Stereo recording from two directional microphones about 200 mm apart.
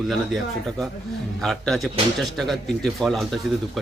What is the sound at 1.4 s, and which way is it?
Speech, centre (ahead or behind).